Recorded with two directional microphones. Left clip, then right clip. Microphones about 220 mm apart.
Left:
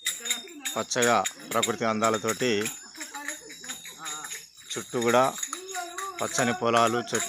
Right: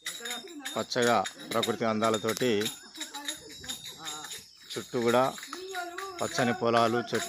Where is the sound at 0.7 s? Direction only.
Centre (ahead or behind).